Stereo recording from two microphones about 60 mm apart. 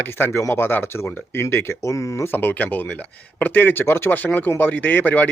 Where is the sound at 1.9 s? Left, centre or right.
Left.